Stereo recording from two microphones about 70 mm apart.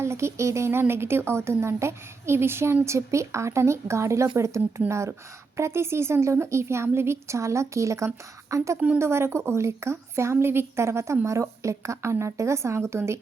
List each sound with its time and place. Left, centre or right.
0.0 s a woman's voice: right